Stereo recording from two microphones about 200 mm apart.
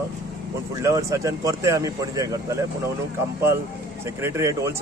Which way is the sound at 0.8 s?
15° right (ahead or behind).